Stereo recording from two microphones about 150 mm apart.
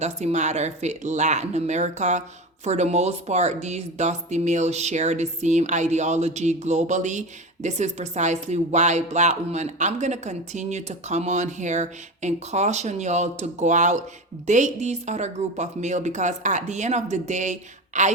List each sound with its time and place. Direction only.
0.0 s speech: 50° right (ahead or behind)